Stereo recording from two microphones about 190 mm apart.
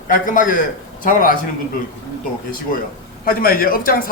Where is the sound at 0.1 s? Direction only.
45° left (ahead or behind).